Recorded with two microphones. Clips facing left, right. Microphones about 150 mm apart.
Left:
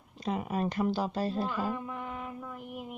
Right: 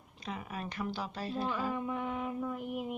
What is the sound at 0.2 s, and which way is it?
Speech, 40° left (ahead or behind).